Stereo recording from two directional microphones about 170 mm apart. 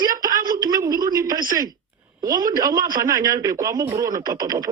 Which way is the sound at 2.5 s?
20° right (ahead or behind).